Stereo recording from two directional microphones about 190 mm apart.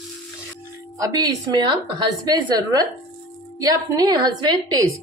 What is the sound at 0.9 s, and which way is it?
A woman's voice, 20° right (ahead or behind).